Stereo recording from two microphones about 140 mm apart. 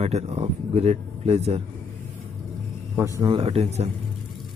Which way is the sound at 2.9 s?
20° right (ahead or behind).